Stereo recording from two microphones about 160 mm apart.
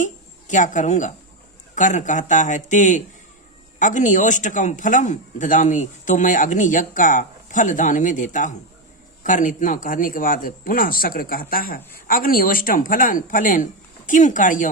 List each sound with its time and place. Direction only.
0.0 s a woman's voice: 50° left (ahead or behind)